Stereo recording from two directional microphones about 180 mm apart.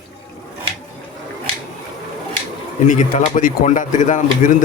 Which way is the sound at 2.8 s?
45° left (ahead or behind).